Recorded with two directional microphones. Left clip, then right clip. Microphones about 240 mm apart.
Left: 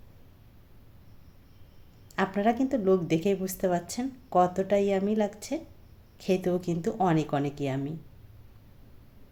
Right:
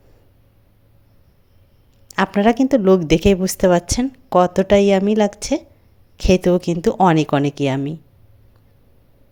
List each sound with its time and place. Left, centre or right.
2.1 s a woman's voice: right